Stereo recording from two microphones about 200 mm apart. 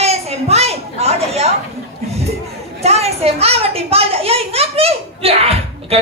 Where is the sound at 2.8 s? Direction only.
30° right (ahead or behind).